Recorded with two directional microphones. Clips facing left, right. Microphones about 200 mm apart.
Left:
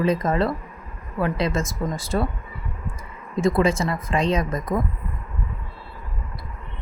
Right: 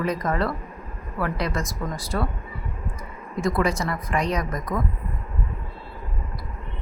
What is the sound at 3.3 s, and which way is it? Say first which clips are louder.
A woman's voice: left 4 dB; 25° left (ahead or behind).